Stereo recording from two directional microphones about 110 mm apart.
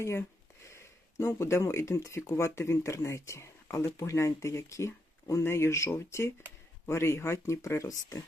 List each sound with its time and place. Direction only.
0.0 s speech: 25° left (ahead or behind)